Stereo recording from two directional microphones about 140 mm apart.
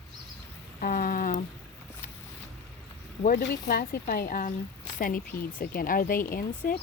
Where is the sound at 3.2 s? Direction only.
90° left.